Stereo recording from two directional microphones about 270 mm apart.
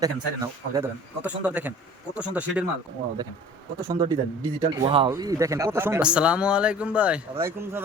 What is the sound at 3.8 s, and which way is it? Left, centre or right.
Speech, centre.